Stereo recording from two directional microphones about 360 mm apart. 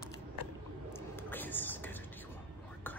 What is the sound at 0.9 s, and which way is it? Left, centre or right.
Whispering, centre.